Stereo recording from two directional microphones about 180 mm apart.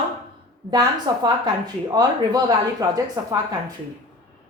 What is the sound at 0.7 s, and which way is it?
Speech, 25° right (ahead or behind).